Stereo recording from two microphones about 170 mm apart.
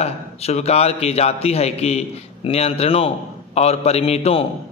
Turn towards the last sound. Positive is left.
turn(degrees=35)  # may be behind; listen again after turning